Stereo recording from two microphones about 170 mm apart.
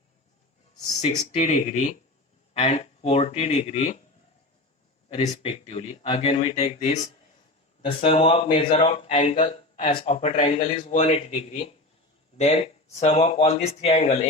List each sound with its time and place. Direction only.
1.0 s speech: 40° left (ahead or behind)
5.0 s speech: 40° left (ahead or behind)